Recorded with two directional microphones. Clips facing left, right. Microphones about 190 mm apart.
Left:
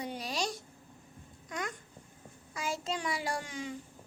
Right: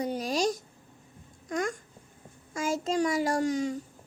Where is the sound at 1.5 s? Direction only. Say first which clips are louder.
Right 8 dB; 45° right (ahead or behind).